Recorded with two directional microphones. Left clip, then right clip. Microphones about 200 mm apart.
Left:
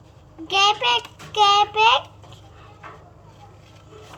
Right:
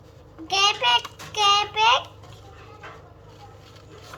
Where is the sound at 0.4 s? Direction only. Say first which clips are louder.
Left 2 dB; 25° left (ahead or behind).